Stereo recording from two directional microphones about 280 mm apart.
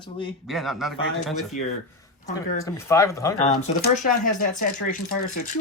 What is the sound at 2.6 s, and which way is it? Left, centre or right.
Speech, centre.